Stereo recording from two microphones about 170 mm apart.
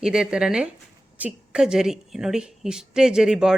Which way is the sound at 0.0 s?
5° right (ahead or behind).